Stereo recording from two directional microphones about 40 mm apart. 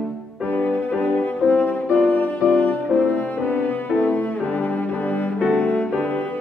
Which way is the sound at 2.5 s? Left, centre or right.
Left.